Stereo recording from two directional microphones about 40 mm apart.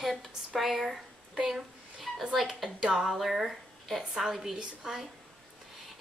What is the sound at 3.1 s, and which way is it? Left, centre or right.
A woman's voice, centre.